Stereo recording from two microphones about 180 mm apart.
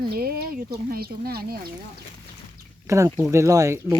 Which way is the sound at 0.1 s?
60° right (ahead or behind).